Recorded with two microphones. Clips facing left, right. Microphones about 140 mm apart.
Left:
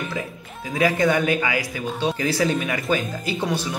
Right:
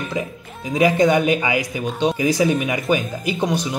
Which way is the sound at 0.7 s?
20° right (ahead or behind).